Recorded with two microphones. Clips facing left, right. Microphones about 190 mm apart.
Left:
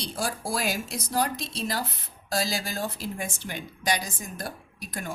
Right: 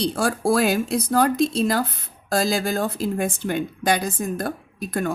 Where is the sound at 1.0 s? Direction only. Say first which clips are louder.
Right 8 dB; 55° right (ahead or behind).